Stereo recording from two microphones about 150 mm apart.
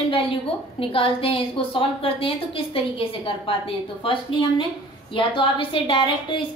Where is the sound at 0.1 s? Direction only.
35° left (ahead or behind).